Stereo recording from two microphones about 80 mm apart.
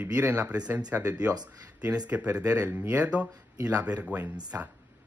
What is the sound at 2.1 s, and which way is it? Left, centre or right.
Speech, centre.